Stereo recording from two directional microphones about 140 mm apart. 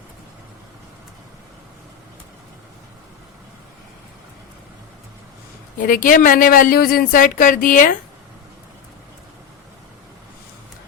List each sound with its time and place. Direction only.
5.7 s speech: 75° left (ahead or behind)